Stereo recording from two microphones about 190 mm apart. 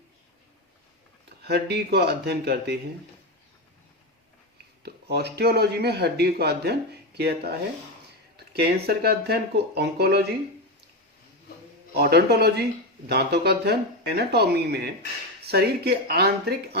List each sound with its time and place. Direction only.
1.5 s speech: 60° right (ahead or behind)
4.8 s speech: 60° right (ahead or behind)
11.9 s speech: 55° right (ahead or behind)